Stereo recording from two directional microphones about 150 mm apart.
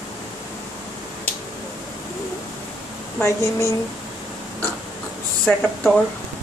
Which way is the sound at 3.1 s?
20° left (ahead or behind).